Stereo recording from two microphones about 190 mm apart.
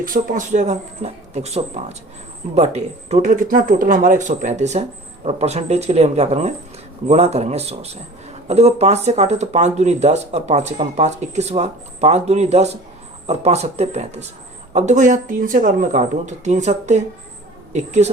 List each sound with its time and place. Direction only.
0.0 s a woman's voice: 45° right (ahead or behind)